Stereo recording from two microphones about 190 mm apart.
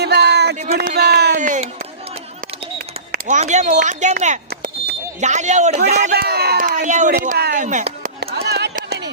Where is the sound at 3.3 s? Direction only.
40° right (ahead or behind).